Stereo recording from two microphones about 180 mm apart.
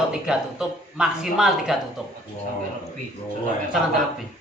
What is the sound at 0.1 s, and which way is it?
A man's voice, 5° right (ahead or behind).